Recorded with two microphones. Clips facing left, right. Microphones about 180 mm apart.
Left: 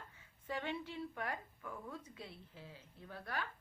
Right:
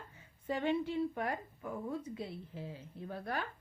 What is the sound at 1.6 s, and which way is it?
Speech, 30° right (ahead or behind).